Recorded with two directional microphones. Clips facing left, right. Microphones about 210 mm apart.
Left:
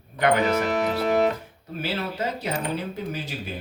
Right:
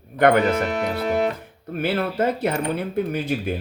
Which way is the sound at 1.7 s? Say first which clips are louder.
Right 6 dB; 55° right (ahead or behind).